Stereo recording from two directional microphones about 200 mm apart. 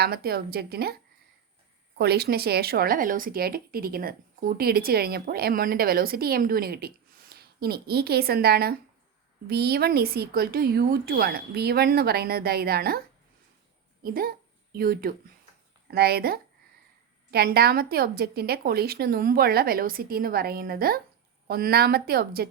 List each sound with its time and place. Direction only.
0.0 s speech: 50° right (ahead or behind)
2.0 s speech: 55° right (ahead or behind)
14.0 s a woman's voice: 45° right (ahead or behind)